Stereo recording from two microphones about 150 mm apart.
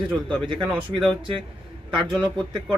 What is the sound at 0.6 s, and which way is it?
Speech, 10° right (ahead or behind).